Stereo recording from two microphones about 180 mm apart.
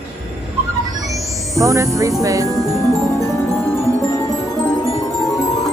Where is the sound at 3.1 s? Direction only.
15° left (ahead or behind).